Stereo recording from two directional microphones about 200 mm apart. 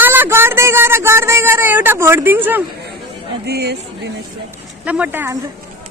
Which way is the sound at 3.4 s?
55° right (ahead or behind).